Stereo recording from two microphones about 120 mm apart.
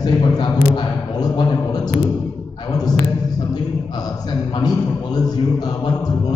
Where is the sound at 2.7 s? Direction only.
35° left (ahead or behind).